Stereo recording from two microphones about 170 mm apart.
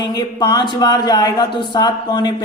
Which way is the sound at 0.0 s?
25° left (ahead or behind).